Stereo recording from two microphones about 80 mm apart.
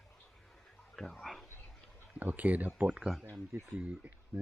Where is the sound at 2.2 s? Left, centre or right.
Centre.